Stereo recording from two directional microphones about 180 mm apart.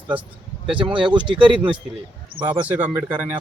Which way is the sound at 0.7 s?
30° right (ahead or behind).